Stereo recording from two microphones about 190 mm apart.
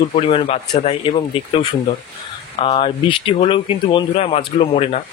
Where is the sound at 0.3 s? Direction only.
30° left (ahead or behind).